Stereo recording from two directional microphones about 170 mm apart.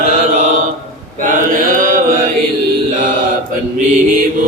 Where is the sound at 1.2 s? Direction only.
50° right (ahead or behind).